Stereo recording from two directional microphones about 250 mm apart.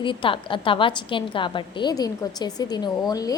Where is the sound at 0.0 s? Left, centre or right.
Centre.